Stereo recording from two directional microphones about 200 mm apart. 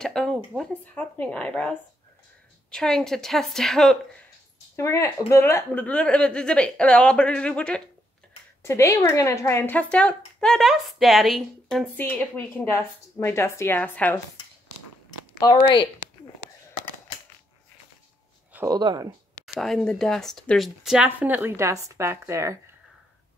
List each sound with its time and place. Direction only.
0.0 s speech: 5° left (ahead or behind)
4.7 s speech: 15° left (ahead or behind)
15.0 s a sound: 20° left (ahead or behind)
18.5 s a sound: 10° right (ahead or behind)
18.8 s speech: 20° right (ahead or behind)
19.4 s speech: centre (ahead or behind)